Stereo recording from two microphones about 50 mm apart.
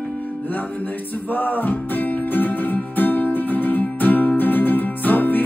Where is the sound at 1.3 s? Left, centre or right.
Left.